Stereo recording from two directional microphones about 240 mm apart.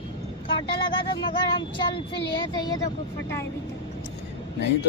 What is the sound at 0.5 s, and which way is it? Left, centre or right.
Child singing, left.